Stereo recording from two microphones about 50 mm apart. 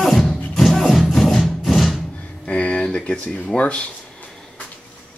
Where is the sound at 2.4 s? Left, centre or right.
Left.